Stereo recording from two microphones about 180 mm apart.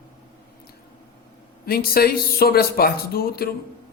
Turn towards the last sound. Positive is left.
turn(degrees=55)  # may be behind; listen again after turning